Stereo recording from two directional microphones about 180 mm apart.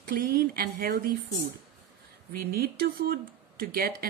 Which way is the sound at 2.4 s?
55° right (ahead or behind).